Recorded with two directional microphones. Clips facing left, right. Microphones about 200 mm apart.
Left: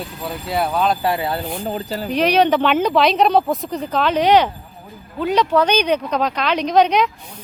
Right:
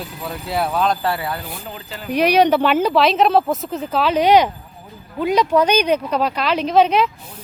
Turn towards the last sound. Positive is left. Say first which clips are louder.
# even
turn(degrees=-5)  # may be behind; listen again after turning